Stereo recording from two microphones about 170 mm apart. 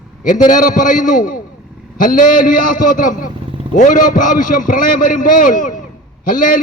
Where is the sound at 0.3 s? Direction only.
50° left (ahead or behind).